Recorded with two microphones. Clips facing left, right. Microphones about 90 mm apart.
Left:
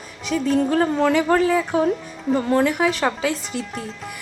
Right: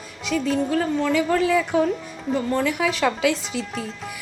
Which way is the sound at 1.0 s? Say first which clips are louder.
Left 2 dB; 60° left (ahead or behind).